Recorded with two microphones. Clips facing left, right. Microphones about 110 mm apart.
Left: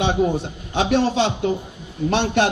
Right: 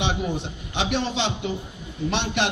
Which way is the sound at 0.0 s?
45° left (ahead or behind).